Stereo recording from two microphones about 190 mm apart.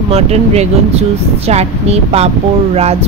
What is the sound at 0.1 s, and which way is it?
Speech, 35° right (ahead or behind).